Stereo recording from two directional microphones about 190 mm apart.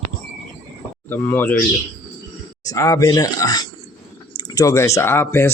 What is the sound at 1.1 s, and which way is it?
Speech, 10° left (ahead or behind).